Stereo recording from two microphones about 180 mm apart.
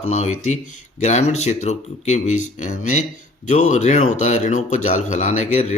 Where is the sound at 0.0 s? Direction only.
40° left (ahead or behind).